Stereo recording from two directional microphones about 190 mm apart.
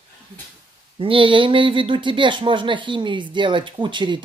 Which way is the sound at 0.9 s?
25° right (ahead or behind).